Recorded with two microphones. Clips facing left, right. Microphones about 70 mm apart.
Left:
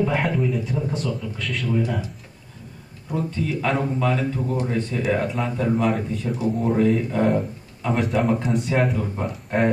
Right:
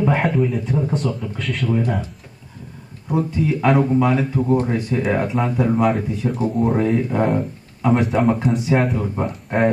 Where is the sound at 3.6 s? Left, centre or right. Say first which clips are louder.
Right 8 dB; right.